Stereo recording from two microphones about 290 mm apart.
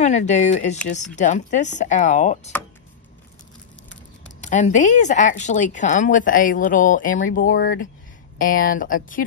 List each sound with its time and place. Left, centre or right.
0.0 s speech: left
3.9 s speech: left